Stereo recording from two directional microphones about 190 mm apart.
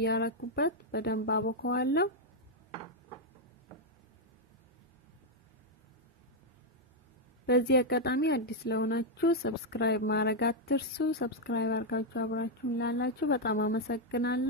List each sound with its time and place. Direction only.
0.0 s speech: 60° left (ahead or behind)
7.4 s speech: 60° left (ahead or behind)